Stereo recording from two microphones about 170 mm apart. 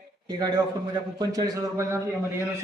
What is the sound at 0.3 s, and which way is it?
Speech, 25° right (ahead or behind).